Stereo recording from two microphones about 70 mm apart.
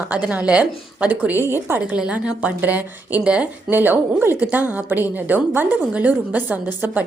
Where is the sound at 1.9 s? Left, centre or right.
Centre.